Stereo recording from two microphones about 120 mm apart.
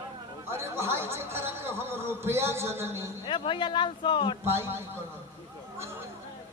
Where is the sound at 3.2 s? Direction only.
45° left (ahead or behind).